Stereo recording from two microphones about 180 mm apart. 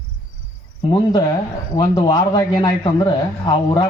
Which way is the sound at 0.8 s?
25° left (ahead or behind).